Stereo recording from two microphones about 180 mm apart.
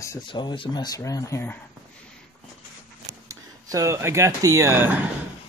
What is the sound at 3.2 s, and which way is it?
Speech, 15° right (ahead or behind).